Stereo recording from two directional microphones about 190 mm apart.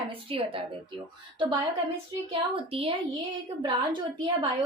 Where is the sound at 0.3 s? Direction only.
30° right (ahead or behind).